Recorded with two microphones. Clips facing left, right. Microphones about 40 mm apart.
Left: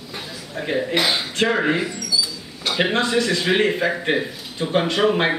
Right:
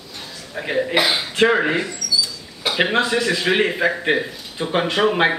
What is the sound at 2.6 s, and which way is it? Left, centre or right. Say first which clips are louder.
A man's voice: right 2 dB; centre.